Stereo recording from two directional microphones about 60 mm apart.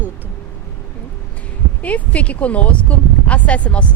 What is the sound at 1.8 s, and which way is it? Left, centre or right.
Speech, left.